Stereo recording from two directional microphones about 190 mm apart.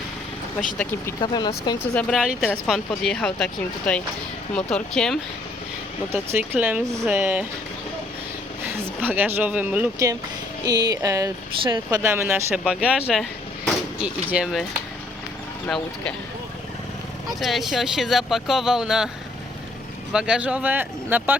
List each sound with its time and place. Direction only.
1.2 s speech: 20° left (ahead or behind)
1.8 s speech: 5° left (ahead or behind)
6.1 s speech: 10° right (ahead or behind)
8.8 s speech: 10° right (ahead or behind)
10.6 s speech: 20° right (ahead or behind)
14.0 s speech: 5° right (ahead or behind)
15.6 s speech: 5° left (ahead or behind)
17.2 s speech: centre (ahead or behind)
20.1 s speech: 5° right (ahead or behind)